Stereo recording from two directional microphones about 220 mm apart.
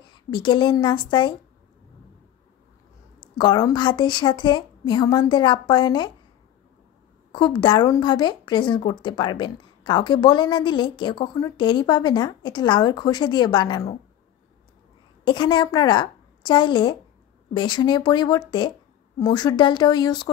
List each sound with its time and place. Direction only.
0.3 s speech: 20° left (ahead or behind)
3.2 s speech: 20° left (ahead or behind)
7.3 s speech: 20° left (ahead or behind)
15.2 s speech: 20° left (ahead or behind)